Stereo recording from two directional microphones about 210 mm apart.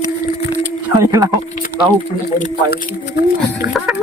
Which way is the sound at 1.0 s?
15° right (ahead or behind).